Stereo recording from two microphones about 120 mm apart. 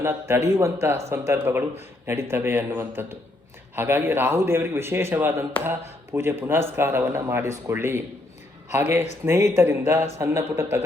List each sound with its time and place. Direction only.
0.0 s a man's voice: 20° right (ahead or behind)
9.2 s a man's voice: 20° right (ahead or behind)